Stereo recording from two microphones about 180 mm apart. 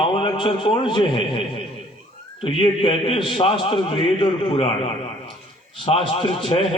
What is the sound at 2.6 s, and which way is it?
Mantra, 30° left (ahead or behind).